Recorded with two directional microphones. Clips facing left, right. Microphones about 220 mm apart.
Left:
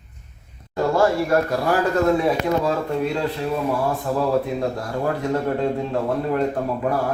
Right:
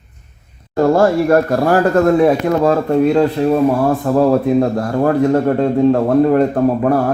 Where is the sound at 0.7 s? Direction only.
50° right (ahead or behind).